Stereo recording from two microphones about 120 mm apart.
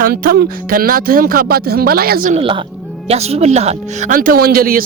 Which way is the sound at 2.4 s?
45° right (ahead or behind).